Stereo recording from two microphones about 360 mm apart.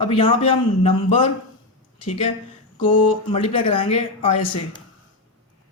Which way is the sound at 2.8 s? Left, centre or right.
Centre.